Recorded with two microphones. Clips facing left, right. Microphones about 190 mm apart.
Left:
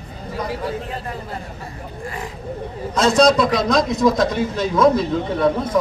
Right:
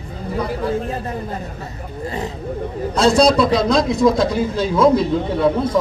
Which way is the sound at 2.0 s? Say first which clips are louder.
Right 5 dB; 25° right (ahead or behind).